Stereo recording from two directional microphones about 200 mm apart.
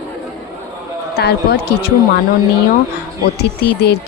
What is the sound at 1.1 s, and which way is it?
Speech, 55° left (ahead or behind).